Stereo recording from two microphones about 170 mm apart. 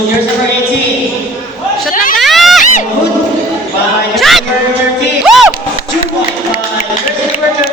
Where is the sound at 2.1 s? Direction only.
Centre (ahead or behind).